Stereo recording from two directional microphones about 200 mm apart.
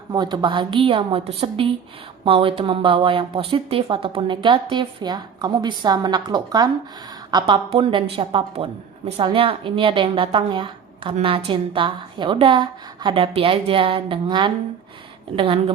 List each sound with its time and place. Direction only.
0.1 s speech: 20° right (ahead or behind)